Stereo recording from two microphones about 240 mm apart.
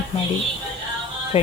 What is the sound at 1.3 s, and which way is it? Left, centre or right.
Speech, left.